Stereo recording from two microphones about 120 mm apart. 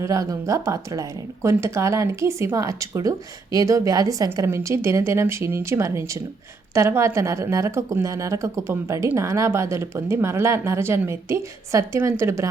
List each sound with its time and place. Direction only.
0.0 s speech: 25° right (ahead or behind)